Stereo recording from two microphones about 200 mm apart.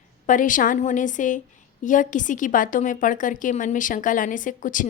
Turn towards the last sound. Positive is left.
turn(degrees=40)  # may be behind; listen again after turning